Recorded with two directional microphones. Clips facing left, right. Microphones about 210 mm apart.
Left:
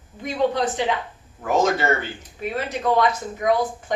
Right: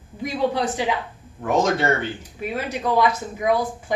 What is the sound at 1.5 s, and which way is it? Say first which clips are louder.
Speech: even; centre (ahead or behind).